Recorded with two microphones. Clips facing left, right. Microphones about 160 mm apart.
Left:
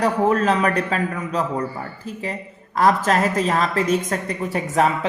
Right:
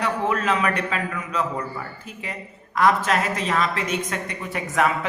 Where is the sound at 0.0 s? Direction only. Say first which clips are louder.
Left 5 dB; 40° left (ahead or behind).